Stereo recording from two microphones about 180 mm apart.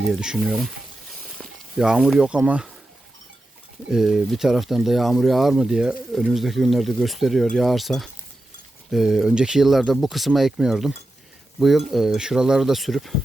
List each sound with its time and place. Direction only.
0.0 s speech: 5° right (ahead or behind)
3.8 s speech: 5° right (ahead or behind)